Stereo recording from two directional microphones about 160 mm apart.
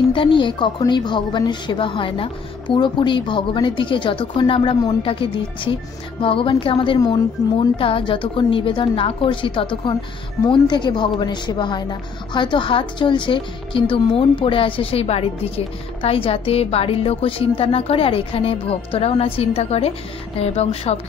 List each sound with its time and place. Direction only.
0.1 s a woman's voice: 30° left (ahead or behind)